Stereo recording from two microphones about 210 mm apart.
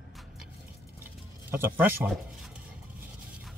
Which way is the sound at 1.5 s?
10° right (ahead or behind).